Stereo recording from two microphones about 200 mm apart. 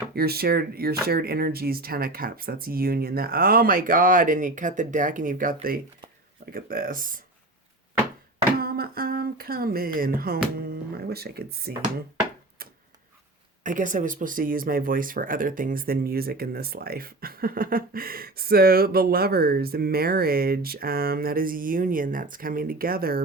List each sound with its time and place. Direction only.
0.1 s speech: 50° right (ahead or behind)
8.5 s speech: 50° right (ahead or behind)
13.7 s speech: 40° right (ahead or behind)